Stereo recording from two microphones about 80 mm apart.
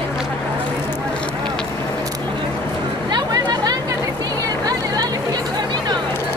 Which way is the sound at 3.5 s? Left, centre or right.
Right.